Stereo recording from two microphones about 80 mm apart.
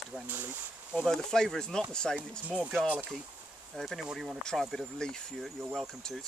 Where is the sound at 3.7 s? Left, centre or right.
Centre.